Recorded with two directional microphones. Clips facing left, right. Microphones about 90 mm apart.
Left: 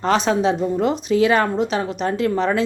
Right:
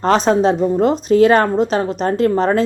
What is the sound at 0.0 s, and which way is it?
A woman's voice, 40° right (ahead or behind).